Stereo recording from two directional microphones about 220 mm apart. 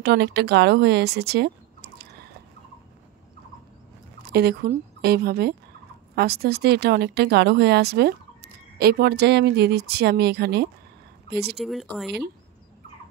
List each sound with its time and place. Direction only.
0.0 s speech: 50° right (ahead or behind)
4.2 s speech: 45° right (ahead or behind)
11.5 s speech: centre (ahead or behind)